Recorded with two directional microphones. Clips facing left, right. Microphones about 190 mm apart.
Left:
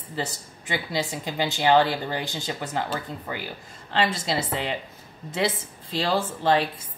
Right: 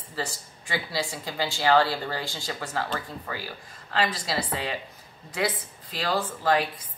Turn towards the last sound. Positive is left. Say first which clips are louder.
# left 2 dB
turn(degrees=25)  # may be behind; listen again after turning